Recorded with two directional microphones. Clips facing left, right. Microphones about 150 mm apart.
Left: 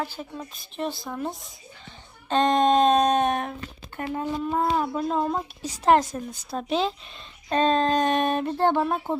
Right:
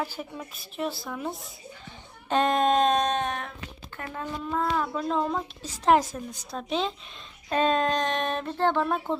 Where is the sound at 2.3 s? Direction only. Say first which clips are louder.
Left 3 dB; 5° right (ahead or behind).